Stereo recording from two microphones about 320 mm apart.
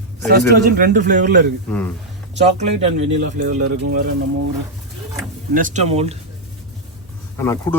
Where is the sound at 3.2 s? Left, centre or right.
Right.